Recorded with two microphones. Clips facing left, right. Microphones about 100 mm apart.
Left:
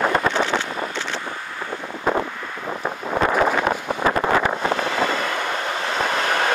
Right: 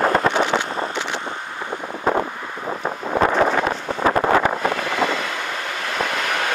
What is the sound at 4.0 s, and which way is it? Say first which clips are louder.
Vehicle: right 4 dB; 30° right (ahead or behind).